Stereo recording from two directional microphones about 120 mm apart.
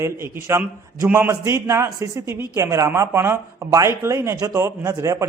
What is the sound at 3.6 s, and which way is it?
Speech, 30° right (ahead or behind).